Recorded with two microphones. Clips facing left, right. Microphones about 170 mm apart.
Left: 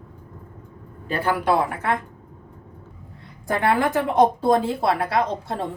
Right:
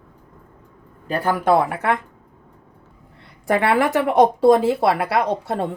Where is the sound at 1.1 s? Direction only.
45° right (ahead or behind).